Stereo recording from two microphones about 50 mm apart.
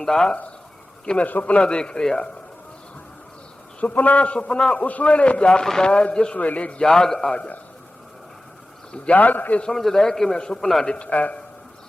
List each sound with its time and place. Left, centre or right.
0.0 s a man's voice: centre
1.0 s a man's voice: left
1.3 s a man's voice: left
1.5 s a man's voice: centre
3.8 s a man's voice: left; by 4.8 s centre
4.8 s a man's voice: left
6.3 s a man's voice: left
6.8 s a man's voice: centre
7.3 s a man's voice: left
9.1 s a man's voice: left
9.7 s a man's voice: centre
10.8 s a man's voice: left